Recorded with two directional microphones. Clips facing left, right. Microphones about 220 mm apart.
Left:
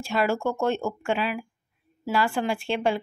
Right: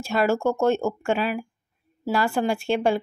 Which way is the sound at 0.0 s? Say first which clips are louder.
Right 3 dB; 45° right (ahead or behind).